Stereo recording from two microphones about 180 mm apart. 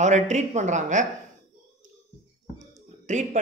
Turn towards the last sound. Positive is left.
turn(degrees=-40)  # may be behind; listen again after turning